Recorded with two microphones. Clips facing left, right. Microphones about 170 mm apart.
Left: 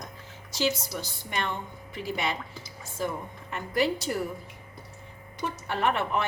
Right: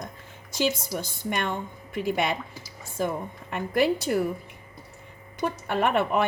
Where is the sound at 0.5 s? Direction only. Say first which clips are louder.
Right 2 dB; 50° right (ahead or behind).